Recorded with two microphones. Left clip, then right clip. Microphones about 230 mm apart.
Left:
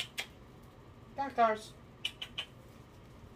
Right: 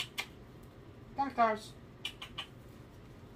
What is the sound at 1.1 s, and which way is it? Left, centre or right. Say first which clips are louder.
Speech: left 1 dB; centre.